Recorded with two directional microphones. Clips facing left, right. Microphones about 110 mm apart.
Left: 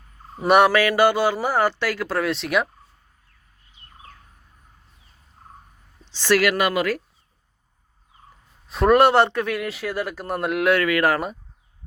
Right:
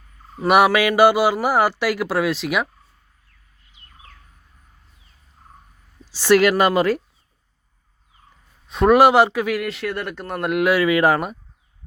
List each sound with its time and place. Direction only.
0.4 s a man's voice: 5° right (ahead or behind)
0.8 s speech: 15° right (ahead or behind)
6.1 s speech: 15° right (ahead or behind)
6.5 s speech: 35° right (ahead or behind)
8.6 s a man's voice: centre (ahead or behind)
10.8 s speech: 20° right (ahead or behind)